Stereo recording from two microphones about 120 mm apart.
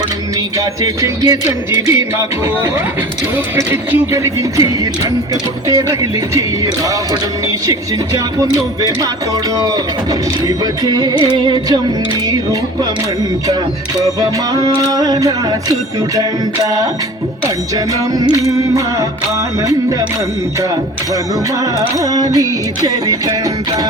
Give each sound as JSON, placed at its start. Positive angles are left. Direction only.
{"t": 0.6, "sound": "music", "side_deg": -30}
{"t": 1.7, "sound": "speech", "side_deg": -25}
{"t": 3.3, "sound": "speech", "side_deg": -20}
{"t": 9.7, "sound": "music", "side_deg": -30}
{"t": 14.0, "sound": "music", "side_deg": -30}
{"t": 17.7, "sound": "speech", "side_deg": -30}
{"t": 22.0, "sound": "music", "side_deg": -30}